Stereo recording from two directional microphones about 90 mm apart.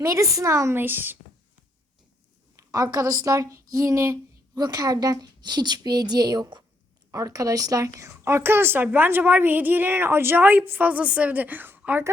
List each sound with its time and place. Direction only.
0.0 s speech: 35° right (ahead or behind)
2.6 s speech: 40° right (ahead or behind)
4.5 s a woman's voice: 45° right (ahead or behind)
7.1 s speech: 40° right (ahead or behind); by 12.0 s 20° right (ahead or behind)